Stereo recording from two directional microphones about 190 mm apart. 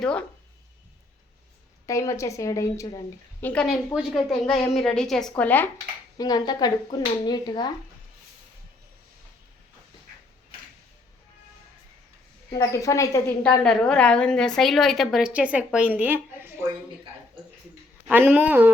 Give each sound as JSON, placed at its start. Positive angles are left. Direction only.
{"t": 0.0, "sound": "a woman's voice", "side_deg": 5}
{"t": 1.9, "sound": "a woman's voice", "side_deg": 15}
{"t": 3.4, "sound": "a woman's voice", "side_deg": 5}
{"t": 6.1, "sound": "speech", "side_deg": 20}
{"t": 12.5, "sound": "a woman's voice", "side_deg": 15}
{"t": 13.4, "sound": "a woman's voice", "side_deg": 5}
{"t": 18.1, "sound": "speech", "side_deg": -10}